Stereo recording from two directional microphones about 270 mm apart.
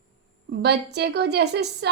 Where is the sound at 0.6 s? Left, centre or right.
Right.